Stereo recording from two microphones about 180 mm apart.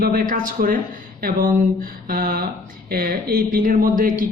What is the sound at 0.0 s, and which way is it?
Speech, 50° right (ahead or behind).